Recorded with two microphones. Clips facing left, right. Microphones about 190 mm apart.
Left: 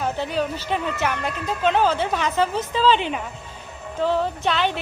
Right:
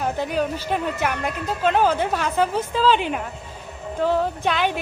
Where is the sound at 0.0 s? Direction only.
10° right (ahead or behind).